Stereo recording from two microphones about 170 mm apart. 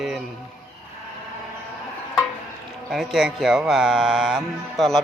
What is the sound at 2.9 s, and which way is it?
Speech, centre (ahead or behind).